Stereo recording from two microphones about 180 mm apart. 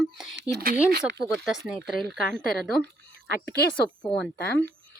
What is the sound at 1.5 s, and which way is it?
Speech, centre (ahead or behind).